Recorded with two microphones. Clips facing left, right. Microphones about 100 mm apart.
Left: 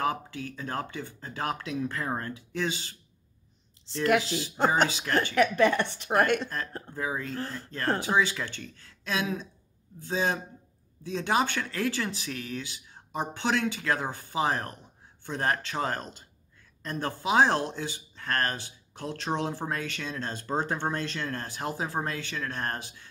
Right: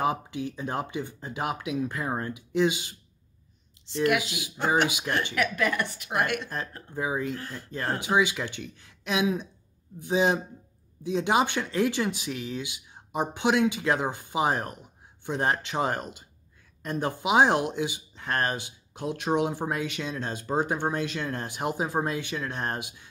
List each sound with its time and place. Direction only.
0.0 s speech: 20° right (ahead or behind)
4.2 s speech: 15° right (ahead or behind)
5.3 s a woman's voice: 30° left (ahead or behind)
6.5 s speech: 20° right (ahead or behind)